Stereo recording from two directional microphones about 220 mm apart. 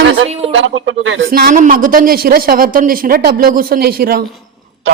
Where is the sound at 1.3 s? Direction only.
40° right (ahead or behind).